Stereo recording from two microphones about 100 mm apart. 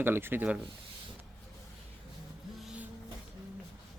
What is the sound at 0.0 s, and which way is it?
Speech, 20° right (ahead or behind).